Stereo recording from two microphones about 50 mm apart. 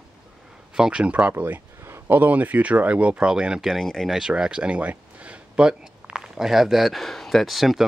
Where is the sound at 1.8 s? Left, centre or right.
Right.